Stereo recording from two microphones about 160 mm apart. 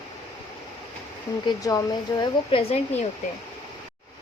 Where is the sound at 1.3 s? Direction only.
20° left (ahead or behind).